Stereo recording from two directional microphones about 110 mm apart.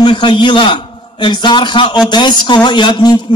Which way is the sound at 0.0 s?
45° left (ahead or behind).